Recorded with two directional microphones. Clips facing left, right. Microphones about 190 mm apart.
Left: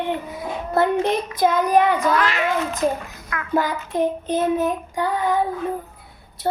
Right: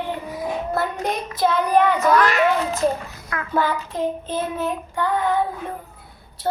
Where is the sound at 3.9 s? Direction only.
20° left (ahead or behind).